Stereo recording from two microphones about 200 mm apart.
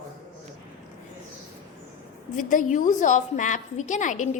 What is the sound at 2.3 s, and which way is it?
A woman's voice, 40° left (ahead or behind).